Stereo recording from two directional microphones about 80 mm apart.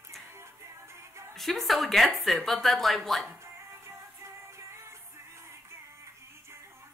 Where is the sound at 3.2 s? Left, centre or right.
Right.